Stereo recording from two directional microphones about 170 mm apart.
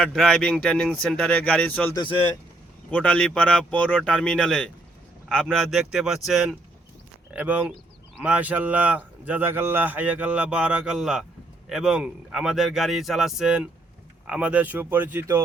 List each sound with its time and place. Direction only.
0.0 s speech: 5° left (ahead or behind)
2.0 s speech: 25° left (ahead or behind)
2.9 s a man's voice: 5° left (ahead or behind); by 15.4 s 10° right (ahead or behind)